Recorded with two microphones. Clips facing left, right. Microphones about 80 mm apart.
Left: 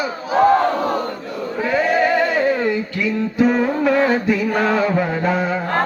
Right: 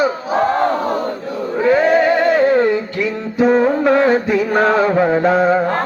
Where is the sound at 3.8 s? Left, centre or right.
Right.